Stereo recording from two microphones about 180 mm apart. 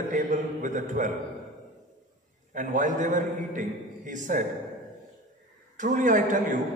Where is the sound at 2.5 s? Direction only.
45° right (ahead or behind).